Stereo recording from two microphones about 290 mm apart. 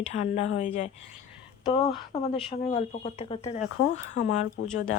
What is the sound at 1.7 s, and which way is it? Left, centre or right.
Speech, centre.